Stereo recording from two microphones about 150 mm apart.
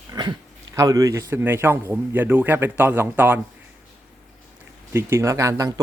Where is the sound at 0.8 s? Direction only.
25° right (ahead or behind).